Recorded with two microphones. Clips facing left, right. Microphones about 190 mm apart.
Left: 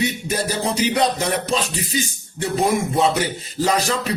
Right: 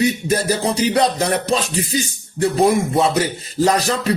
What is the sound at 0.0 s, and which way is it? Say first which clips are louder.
Music: right 5 dB; 40° right (ahead or behind).